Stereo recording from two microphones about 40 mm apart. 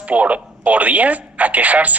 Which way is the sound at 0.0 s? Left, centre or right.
Right.